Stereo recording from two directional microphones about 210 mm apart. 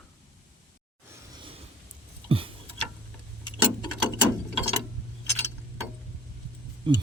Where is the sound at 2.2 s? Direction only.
25° right (ahead or behind).